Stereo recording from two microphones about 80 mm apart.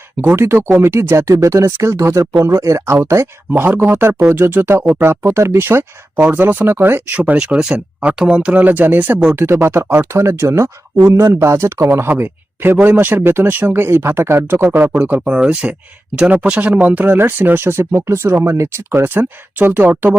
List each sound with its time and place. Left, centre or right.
0.3 s speech: right
3.5 s speech: right
7.3 s a man's voice: centre; by 20.1 s right